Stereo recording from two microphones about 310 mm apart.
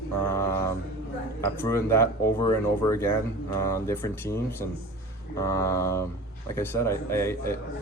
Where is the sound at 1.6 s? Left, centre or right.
Centre.